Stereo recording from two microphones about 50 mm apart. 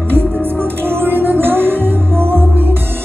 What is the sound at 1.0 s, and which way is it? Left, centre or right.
Music, right.